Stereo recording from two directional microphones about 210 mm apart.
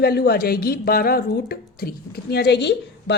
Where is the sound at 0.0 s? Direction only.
50° left (ahead or behind).